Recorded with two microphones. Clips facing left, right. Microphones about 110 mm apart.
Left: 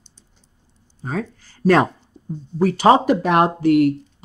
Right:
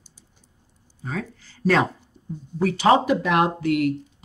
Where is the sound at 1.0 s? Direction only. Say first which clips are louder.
Left 5 dB; 40° left (ahead or behind).